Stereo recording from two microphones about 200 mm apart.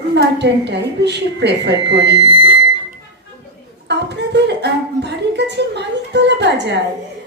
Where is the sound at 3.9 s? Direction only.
60° right (ahead or behind).